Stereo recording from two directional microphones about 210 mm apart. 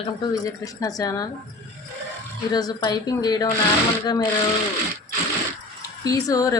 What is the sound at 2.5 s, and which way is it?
A woman's voice, 20° left (ahead or behind).